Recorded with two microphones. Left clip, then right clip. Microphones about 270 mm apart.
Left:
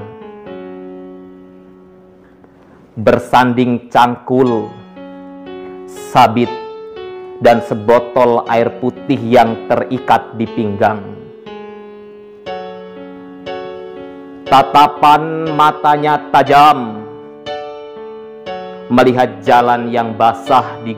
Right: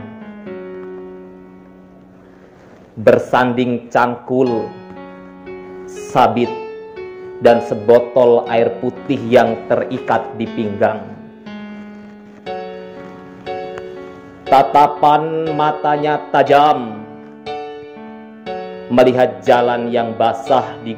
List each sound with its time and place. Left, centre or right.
3.0 s speech: left
6.0 s speech: left
14.5 s music: left
18.9 s music: left